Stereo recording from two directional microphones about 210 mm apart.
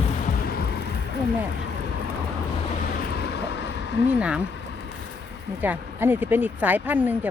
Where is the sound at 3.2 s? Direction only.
55° left (ahead or behind).